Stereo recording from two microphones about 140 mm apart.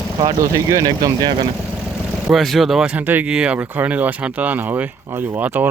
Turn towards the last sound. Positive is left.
turn(degrees=-15)  # may be behind; listen again after turning